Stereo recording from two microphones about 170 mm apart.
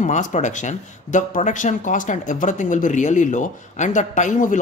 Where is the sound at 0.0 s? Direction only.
45° left (ahead or behind).